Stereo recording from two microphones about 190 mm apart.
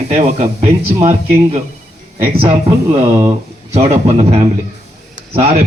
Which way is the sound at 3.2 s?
35° right (ahead or behind).